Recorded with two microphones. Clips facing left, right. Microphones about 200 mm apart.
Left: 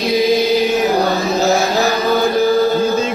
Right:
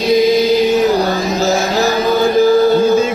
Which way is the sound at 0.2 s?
Centre (ahead or behind).